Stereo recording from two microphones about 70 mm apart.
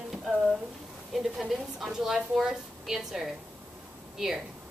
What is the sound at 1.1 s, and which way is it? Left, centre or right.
Speech, centre.